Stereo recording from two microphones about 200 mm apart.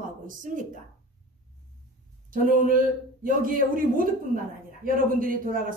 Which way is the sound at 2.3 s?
45° right (ahead or behind).